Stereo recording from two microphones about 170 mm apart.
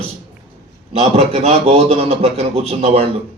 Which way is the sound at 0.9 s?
40° right (ahead or behind).